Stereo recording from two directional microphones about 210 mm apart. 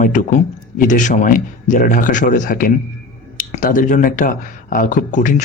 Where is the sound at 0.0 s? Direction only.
40° left (ahead or behind).